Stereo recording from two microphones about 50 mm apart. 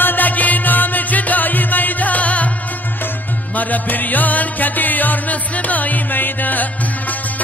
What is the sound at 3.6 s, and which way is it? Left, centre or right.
Music, left.